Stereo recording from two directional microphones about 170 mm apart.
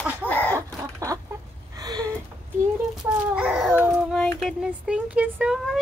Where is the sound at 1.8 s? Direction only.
20° right (ahead or behind).